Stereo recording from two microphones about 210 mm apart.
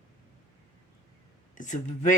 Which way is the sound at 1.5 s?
35° left (ahead or behind).